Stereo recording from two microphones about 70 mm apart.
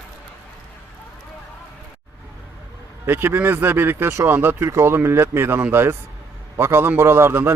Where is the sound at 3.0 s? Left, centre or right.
Right.